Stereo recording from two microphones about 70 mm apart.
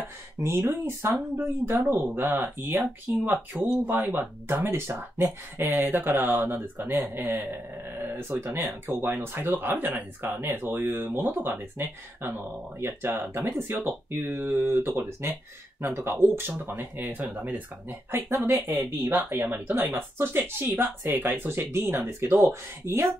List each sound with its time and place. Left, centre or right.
0.4 s speech: right
8.0 s speech: right
18.3 s speech: right